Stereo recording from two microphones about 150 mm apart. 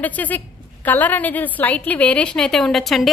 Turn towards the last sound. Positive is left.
turn(degrees=0)  # may be behind; listen again after turning